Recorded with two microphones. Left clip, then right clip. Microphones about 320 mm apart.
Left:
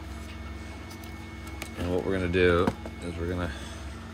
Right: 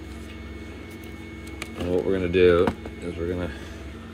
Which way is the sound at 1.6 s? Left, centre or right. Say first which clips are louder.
Right 5 dB; left.